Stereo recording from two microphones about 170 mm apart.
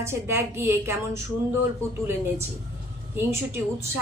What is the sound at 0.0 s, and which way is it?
Speech, 15° right (ahead or behind).